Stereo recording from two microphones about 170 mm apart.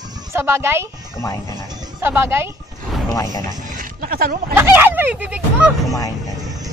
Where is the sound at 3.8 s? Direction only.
60° right (ahead or behind).